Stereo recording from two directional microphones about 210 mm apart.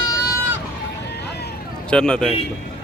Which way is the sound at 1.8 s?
5° left (ahead or behind).